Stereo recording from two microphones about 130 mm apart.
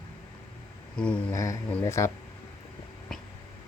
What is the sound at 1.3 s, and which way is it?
Speech, 25° left (ahead or behind).